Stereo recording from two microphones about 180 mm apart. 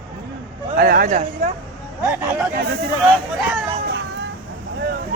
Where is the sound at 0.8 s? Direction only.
55° right (ahead or behind).